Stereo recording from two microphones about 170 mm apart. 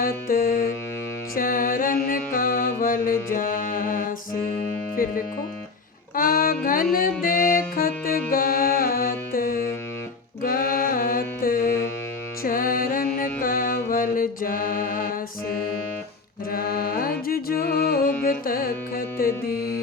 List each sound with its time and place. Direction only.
0.0 s music: 55° left (ahead or behind)
1.4 s mantra: 55° left (ahead or behind)
5.0 s speech: 55° left (ahead or behind)
6.1 s music: 55° left (ahead or behind)